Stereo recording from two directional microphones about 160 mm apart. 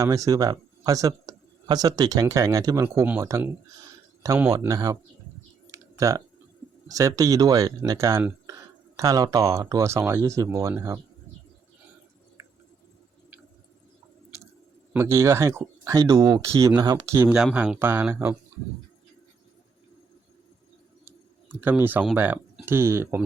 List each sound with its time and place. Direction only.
0.0 s speech: 20° right (ahead or behind)
5.6 s typing: 20° right (ahead or behind)
6.8 s speech: 20° right (ahead or behind)
14.9 s speech: 15° right (ahead or behind)
21.5 s speech: 15° right (ahead or behind)